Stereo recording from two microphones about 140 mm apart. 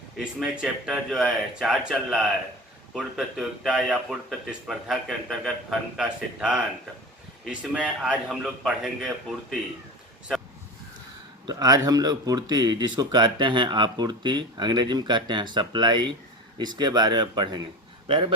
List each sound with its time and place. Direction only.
0.3 s speech: 5° right (ahead or behind)
11.4 s speech: 25° right (ahead or behind)